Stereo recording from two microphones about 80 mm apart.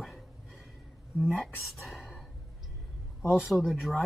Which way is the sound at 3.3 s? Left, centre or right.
Centre.